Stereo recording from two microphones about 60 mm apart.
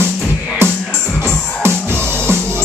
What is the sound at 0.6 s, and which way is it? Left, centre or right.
Music, right.